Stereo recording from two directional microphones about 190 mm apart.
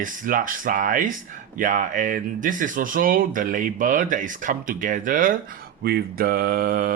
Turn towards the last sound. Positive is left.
turn(degrees=-50)  # may be behind; listen again after turning